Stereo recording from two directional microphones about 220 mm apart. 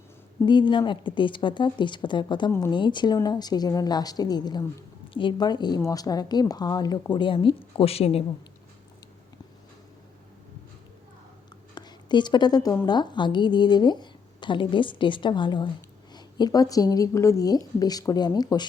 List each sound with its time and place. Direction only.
0.4 s speech: 20° left (ahead or behind)
11.7 s a woman's voice: 20° left (ahead or behind)